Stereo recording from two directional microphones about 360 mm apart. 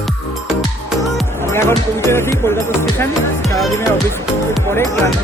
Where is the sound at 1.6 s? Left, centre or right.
Centre.